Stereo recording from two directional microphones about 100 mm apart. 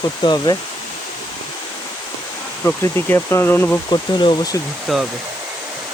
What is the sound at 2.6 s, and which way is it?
Speech, 20° left (ahead or behind).